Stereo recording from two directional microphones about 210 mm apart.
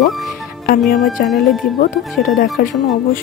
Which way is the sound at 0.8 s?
Centre (ahead or behind).